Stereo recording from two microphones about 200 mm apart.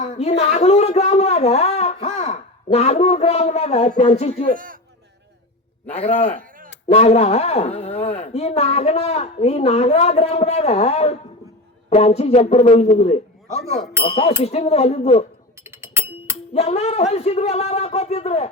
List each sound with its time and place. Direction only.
0.0 s speech: 30° left (ahead or behind)
4.5 s speech: 45° right (ahead or behind)
6.0 s a woman's voice: 30° left (ahead or behind)
15.6 s music: 15° right (ahead or behind)
16.6 s a woman's voice: 30° left (ahead or behind)